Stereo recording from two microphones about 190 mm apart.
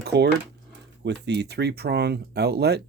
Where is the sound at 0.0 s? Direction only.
60° right (ahead or behind).